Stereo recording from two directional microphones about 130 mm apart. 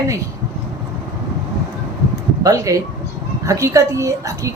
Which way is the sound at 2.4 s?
25° right (ahead or behind).